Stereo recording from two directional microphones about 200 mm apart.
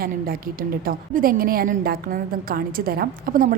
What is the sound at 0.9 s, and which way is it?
A woman's voice, 45° right (ahead or behind).